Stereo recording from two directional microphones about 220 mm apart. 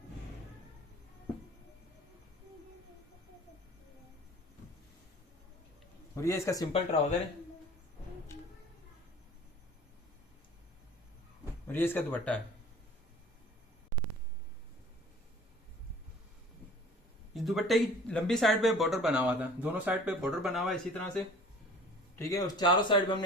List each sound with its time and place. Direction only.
6.1 s speech: 15° left (ahead or behind)
8.3 s music: 10° left (ahead or behind)
11.7 s speech: 10° left (ahead or behind)
17.3 s speech: centre (ahead or behind); by 23.2 s 20° left (ahead or behind)